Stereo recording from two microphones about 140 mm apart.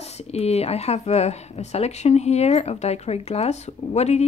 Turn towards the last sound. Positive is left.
turn(degrees=50)  # may be behind; listen again after turning